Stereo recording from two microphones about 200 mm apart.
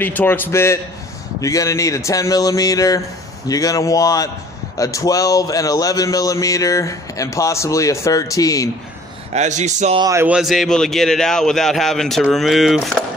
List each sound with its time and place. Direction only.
0.0 s speech: 10° left (ahead or behind)
9.3 s speech: 35° right (ahead or behind)
9.9 s a man's voice: 15° right (ahead or behind); by 12.9 s centre (ahead or behind)